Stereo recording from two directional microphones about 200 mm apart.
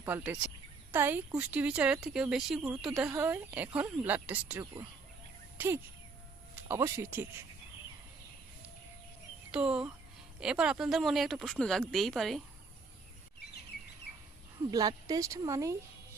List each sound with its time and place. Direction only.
0.0 s speech: 10° right (ahead or behind)
9.5 s speech: 5° right (ahead or behind)
14.6 s speech: 20° right (ahead or behind)